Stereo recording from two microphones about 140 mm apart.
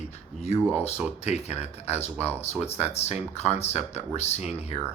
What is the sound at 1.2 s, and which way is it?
Speech, 50° left (ahead or behind).